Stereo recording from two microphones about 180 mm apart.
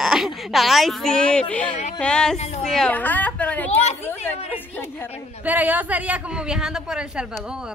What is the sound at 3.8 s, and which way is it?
Speech, 35° left (ahead or behind).